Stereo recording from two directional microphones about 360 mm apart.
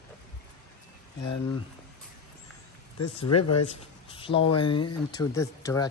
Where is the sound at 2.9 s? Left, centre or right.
Left.